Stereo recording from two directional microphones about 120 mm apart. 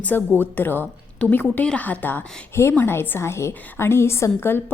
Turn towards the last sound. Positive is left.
turn(degrees=20)  # may be behind; listen again after turning